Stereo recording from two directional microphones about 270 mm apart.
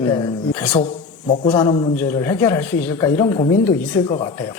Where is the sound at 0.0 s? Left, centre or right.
Centre.